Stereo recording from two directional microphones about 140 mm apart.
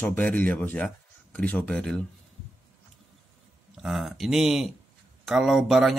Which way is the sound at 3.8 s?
Centre (ahead or behind).